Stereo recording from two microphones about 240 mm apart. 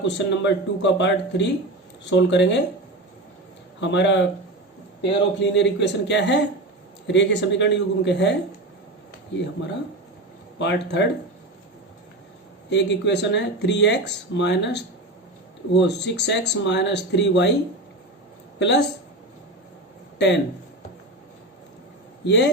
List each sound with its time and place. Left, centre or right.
0.0 s speech: left
3.8 s speech: left
5.4 s speech: left
10.6 s speech: left
12.7 s speech: left
18.6 s speech: left
20.1 s speech: left
22.2 s speech: left